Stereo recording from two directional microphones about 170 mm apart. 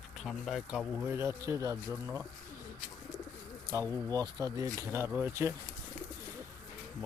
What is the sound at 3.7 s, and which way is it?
Speech, 20° right (ahead or behind).